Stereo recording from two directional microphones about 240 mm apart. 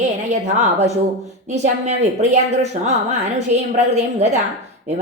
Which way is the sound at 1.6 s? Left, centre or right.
Right.